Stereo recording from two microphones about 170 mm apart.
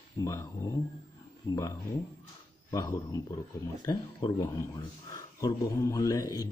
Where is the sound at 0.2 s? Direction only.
20° left (ahead or behind).